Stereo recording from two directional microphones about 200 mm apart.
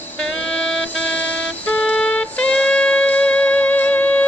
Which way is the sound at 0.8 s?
5° left (ahead or behind).